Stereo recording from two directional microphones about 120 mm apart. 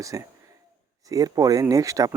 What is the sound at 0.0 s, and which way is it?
Speech, 30° right (ahead or behind).